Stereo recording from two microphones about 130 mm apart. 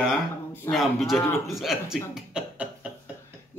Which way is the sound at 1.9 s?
5° right (ahead or behind).